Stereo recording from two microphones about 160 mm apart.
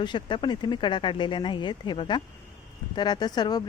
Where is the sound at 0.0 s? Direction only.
30° left (ahead or behind).